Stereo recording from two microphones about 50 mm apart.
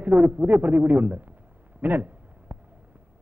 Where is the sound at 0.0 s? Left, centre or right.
Right.